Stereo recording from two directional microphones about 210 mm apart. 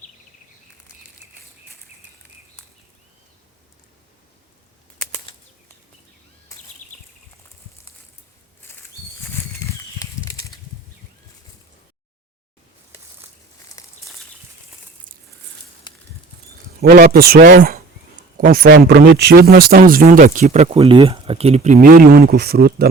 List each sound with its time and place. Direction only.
6.8 s horse: 35° left (ahead or behind)
9.2 s bird flight: 15° left (ahead or behind)
13.8 s a sound: 15° left (ahead or behind)
16.8 s speech: 45° right (ahead or behind)